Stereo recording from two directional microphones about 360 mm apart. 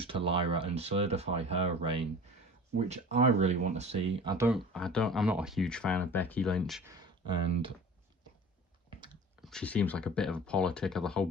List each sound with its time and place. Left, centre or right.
0.0 s speech: centre
9.4 s speech: centre